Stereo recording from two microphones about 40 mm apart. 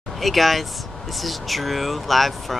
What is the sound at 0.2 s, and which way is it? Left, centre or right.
Speech, centre.